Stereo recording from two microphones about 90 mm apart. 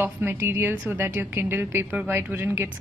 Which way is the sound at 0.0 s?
25° right (ahead or behind).